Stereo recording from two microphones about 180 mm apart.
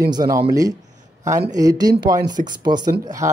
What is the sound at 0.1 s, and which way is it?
Speech, 20° right (ahead or behind).